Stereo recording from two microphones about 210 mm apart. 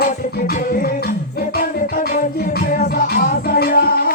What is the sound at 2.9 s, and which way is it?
Music, 45° left (ahead or behind).